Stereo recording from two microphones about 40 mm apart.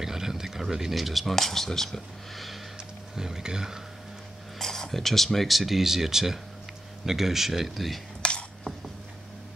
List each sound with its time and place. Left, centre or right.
0.0 s speech: centre
3.2 s speech: centre
4.6 s speech: centre
8.2 s a sound: left